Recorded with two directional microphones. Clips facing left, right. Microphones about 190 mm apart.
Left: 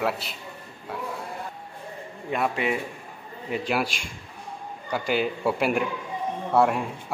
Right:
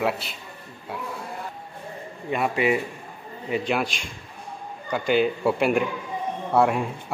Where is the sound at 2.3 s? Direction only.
5° right (ahead or behind).